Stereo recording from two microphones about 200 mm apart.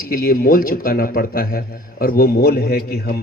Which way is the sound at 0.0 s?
45° left (ahead or behind).